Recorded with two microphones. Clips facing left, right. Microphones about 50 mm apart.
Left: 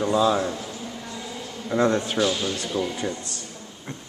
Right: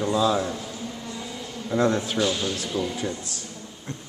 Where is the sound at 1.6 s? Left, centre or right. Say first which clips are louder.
Left 1 dB; centre.